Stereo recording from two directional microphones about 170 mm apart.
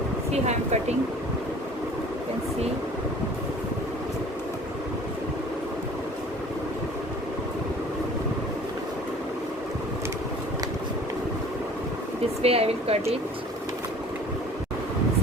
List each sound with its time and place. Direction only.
0.4 s speech: 40° right (ahead or behind)
12.4 s speech: 35° right (ahead or behind)